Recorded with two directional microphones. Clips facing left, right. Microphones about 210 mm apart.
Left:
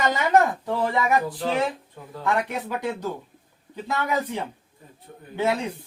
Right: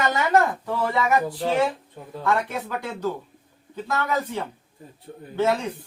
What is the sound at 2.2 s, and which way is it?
Speech, 15° left (ahead or behind).